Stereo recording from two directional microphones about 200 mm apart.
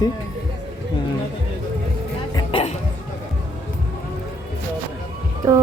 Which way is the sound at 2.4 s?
30° left (ahead or behind).